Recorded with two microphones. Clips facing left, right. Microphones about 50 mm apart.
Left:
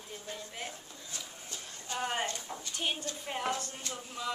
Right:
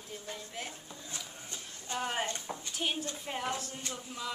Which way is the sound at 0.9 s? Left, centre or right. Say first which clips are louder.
Right 1 dB; right.